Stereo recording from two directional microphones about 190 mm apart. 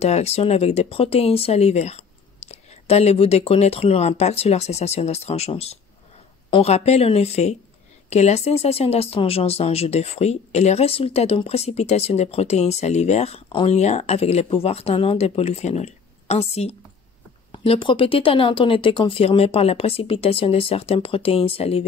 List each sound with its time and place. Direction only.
0.0 s speech: 35° left (ahead or behind)